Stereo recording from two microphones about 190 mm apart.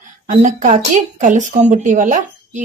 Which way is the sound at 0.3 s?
40° right (ahead or behind).